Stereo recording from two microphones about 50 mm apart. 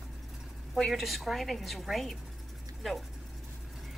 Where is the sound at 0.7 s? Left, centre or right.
Centre.